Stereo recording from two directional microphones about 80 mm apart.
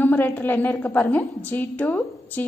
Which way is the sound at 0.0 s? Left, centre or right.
Left.